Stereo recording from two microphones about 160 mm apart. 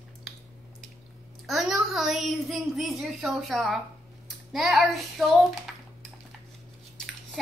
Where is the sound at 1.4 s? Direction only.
Centre (ahead or behind).